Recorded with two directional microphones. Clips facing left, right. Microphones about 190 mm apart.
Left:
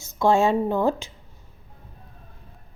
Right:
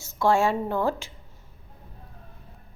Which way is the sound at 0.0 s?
20° left (ahead or behind).